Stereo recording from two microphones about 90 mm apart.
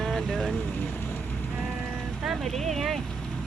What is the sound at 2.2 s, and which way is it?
Speech, centre (ahead or behind).